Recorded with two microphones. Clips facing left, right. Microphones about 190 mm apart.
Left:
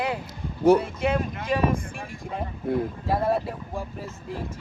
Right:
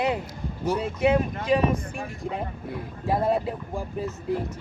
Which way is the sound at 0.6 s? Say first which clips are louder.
Left 9 dB; 55° left (ahead or behind).